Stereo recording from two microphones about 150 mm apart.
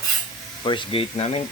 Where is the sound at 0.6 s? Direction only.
35° left (ahead or behind).